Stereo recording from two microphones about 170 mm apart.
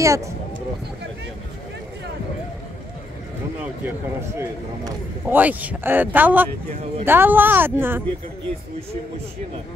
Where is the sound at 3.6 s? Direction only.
10° right (ahead or behind).